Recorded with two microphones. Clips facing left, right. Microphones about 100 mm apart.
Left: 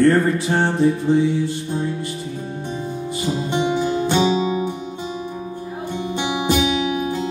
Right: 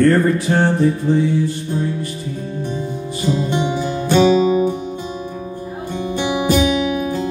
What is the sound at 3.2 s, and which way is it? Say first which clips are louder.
Music: right 3 dB; 15° left (ahead or behind).